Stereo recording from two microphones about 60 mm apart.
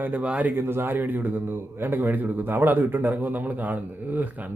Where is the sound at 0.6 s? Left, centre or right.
Right.